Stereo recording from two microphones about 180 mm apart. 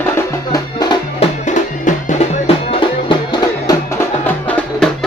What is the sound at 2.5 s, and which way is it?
Music, 35° left (ahead or behind).